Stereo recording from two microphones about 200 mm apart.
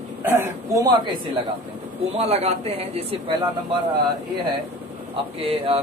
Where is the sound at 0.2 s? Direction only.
15° right (ahead or behind).